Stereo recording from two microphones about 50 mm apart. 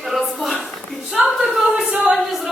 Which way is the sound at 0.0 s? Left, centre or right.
Centre.